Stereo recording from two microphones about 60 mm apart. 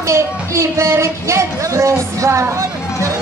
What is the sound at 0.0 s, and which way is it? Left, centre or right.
A woman's voice, right.